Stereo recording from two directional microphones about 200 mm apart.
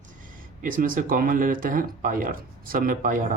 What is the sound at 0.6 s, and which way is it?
Speech, 45° right (ahead or behind).